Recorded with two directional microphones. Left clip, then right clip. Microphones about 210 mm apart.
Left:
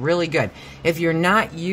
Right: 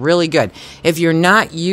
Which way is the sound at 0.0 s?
40° right (ahead or behind).